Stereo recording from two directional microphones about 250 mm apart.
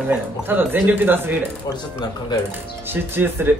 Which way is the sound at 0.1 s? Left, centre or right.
Centre.